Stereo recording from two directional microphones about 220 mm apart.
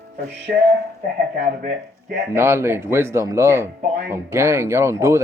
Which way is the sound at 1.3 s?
50° right (ahead or behind).